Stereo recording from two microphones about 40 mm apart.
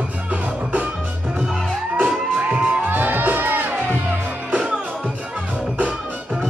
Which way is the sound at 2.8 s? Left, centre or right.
Right.